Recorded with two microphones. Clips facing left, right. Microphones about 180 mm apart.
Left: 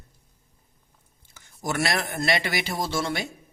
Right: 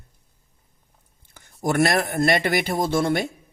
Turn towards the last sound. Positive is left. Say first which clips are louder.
# right 6 dB
turn(degrees=-55)  # may be behind; listen again after turning